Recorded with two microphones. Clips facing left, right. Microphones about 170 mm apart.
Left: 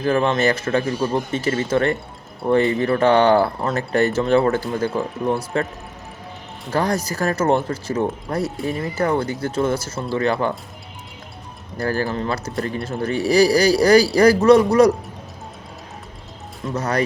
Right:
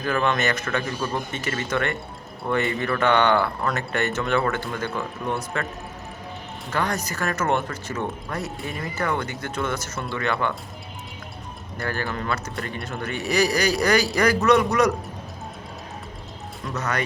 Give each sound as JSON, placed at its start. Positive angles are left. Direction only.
{"t": 0.0, "sound": "a man's voice", "side_deg": 30}
{"t": 6.7, "sound": "a man's voice", "side_deg": 35}
{"t": 11.8, "sound": "a man's voice", "side_deg": 35}
{"t": 16.6, "sound": "a man's voice", "side_deg": 30}